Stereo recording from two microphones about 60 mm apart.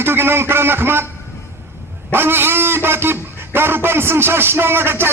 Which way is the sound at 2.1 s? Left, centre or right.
Right.